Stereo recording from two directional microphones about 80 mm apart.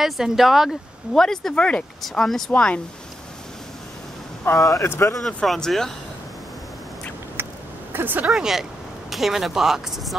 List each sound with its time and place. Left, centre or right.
0.0 s speech: centre
2.5 s speech: centre
4.6 s speech: left
4.8 s speech: left
5.2 s speech: centre
7.4 s a sound: right
7.9 s speech: right
8.3 s speech: centre